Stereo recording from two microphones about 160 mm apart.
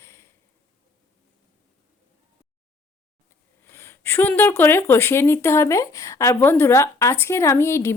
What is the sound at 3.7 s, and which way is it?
Speech, 15° left (ahead or behind).